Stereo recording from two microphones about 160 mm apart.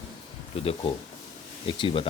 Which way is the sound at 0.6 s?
35° left (ahead or behind).